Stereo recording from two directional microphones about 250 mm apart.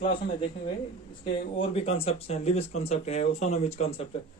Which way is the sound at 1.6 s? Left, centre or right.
Left.